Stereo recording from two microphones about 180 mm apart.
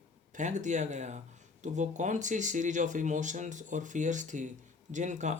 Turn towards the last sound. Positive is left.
turn(degrees=-40)  # may be behind; listen again after turning